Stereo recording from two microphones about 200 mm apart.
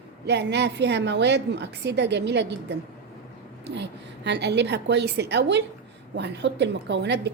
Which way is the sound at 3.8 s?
60° right (ahead or behind).